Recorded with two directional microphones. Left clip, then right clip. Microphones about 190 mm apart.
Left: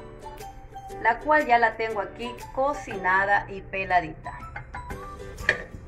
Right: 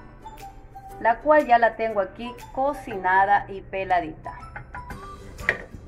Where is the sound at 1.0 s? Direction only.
45° right (ahead or behind).